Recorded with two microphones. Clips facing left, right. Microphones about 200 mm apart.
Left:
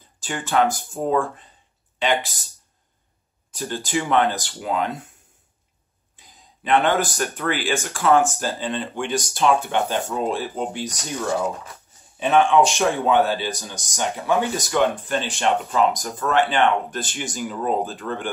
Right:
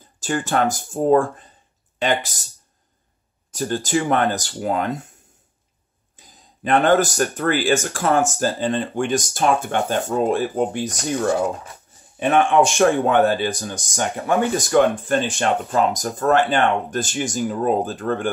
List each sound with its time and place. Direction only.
0.2 s speech: 45° right (ahead or behind)
3.5 s speech: 45° right (ahead or behind)
6.1 s speech: 45° right (ahead or behind)
12.2 s speech: 50° right (ahead or behind)